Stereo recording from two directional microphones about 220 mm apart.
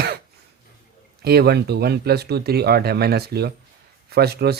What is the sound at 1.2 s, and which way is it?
Speech, 45° right (ahead or behind).